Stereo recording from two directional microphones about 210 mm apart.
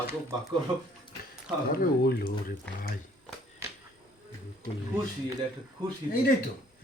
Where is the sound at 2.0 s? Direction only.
45° left (ahead or behind).